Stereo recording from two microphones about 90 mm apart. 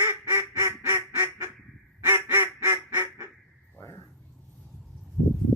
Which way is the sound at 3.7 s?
25° left (ahead or behind).